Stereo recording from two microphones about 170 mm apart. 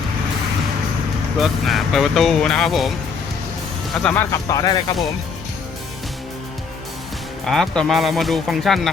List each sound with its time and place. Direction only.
1.4 s speech: centre (ahead or behind)
4.0 s speech: 15° left (ahead or behind)
7.4 s speech: centre (ahead or behind)